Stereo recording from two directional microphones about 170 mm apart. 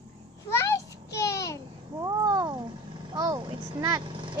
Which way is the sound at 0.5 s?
15° left (ahead or behind).